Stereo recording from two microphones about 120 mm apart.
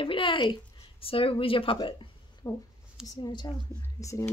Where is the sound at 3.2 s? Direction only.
40° left (ahead or behind).